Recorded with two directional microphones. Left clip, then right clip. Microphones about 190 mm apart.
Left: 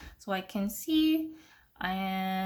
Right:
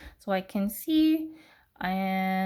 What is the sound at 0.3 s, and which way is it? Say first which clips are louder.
Speech: right 4 dB; 25° right (ahead or behind).